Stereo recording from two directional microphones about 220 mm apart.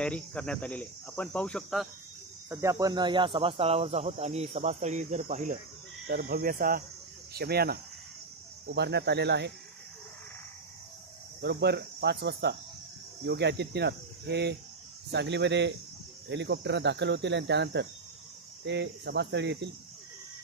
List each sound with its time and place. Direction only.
0.0 s speech: 5° left (ahead or behind)
2.5 s speech: 15° right (ahead or behind); by 6.8 s 40° right (ahead or behind)
7.3 s cricket: 45° right (ahead or behind)
11.4 s cricket: 50° right (ahead or behind)